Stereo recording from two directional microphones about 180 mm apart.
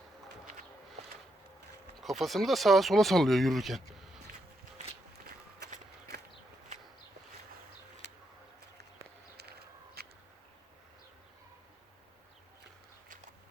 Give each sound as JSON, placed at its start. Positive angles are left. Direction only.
{"t": 2.0, "sound": "speech", "side_deg": 0}
{"t": 4.3, "sound": "walk", "side_deg": -55}
{"t": 9.4, "sound": "a sound", "side_deg": -65}